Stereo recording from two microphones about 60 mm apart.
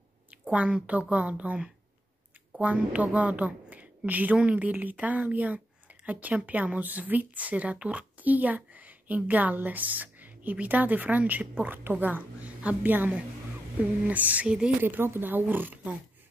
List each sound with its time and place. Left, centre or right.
0.5 s a woman's voice: centre
14.8 s speech: right